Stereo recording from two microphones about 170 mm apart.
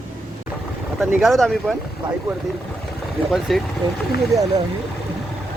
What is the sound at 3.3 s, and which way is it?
Speech, centre (ahead or behind).